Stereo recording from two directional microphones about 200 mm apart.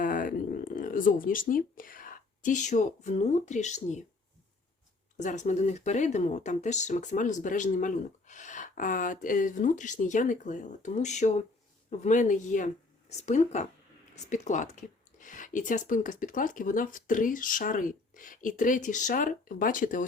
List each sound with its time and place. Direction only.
0.0 s speech: 45° left (ahead or behind)
5.1 s speech: 35° left (ahead or behind)